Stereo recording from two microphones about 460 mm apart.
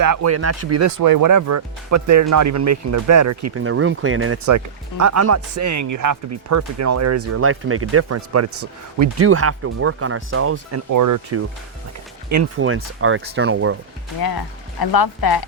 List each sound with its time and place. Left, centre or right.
0.0 s speech: right
10.9 s speech: right
14.2 s speech: left